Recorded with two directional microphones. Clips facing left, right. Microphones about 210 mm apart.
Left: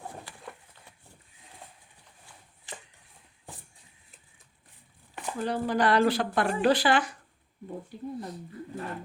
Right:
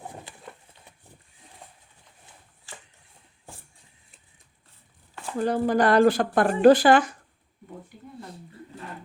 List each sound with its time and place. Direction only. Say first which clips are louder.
0.0 s horse: right 1 dB; 20° right (ahead or behind)
2.7 s a sound: left 2 dB; 20° left (ahead or behind)
5.4 s speech: right 5 dB; 45° right (ahead or behind)